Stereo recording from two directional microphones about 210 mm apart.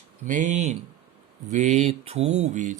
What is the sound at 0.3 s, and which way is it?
Speech, 35° right (ahead or behind).